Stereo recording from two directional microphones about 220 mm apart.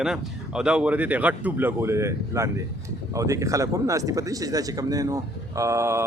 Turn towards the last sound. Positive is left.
turn(degrees=-15)  # may be behind; listen again after turning